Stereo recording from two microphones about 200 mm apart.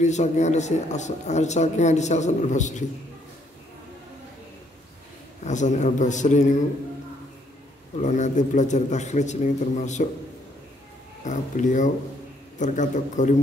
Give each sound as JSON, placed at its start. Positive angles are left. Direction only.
{"t": 0.0, "sound": "a man's voice", "side_deg": 35}
{"t": 5.4, "sound": "a man's voice", "side_deg": 35}
{"t": 8.0, "sound": "a man's voice", "side_deg": 35}
{"t": 11.2, "sound": "a man's voice", "side_deg": 40}